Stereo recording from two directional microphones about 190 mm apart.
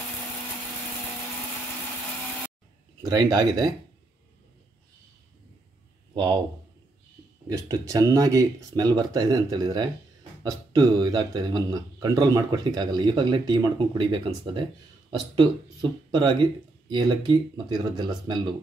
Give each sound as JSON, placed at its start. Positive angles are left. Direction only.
{"t": 3.0, "sound": "a man's voice", "side_deg": -20}
{"t": 6.1, "sound": "speech", "side_deg": -20}
{"t": 7.4, "sound": "a man's voice", "side_deg": -15}